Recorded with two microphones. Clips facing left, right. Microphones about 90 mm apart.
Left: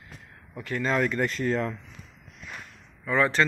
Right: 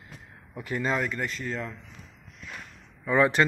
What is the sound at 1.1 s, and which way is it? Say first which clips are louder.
Speech: left 6 dB; 50° left (ahead or behind).